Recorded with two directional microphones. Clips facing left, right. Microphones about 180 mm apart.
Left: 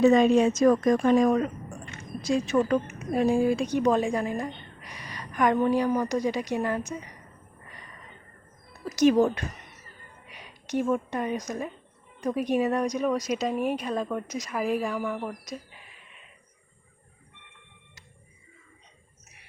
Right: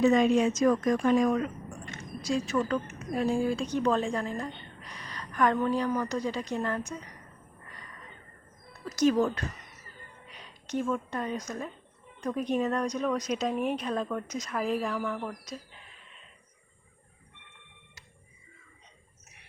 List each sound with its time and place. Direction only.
0.0 s a woman's voice: 35° left (ahead or behind)
2.2 s a woman's voice: 20° left (ahead or behind)
8.8 s a woman's voice: 20° left (ahead or behind)